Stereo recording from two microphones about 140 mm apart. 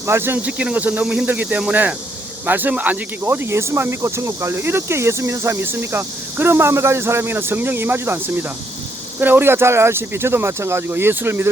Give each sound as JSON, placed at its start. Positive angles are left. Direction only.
{"t": 0.1, "sound": "speech", "side_deg": -15}